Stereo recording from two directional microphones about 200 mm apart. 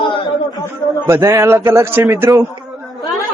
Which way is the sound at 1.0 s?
15° right (ahead or behind).